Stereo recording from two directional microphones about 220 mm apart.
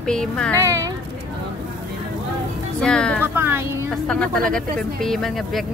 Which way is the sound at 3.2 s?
10° right (ahead or behind).